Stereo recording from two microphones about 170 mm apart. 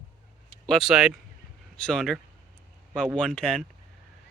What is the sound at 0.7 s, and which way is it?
Speech, centre (ahead or behind).